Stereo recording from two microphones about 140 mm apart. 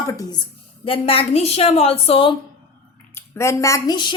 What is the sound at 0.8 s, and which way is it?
A woman's voice, 40° left (ahead or behind).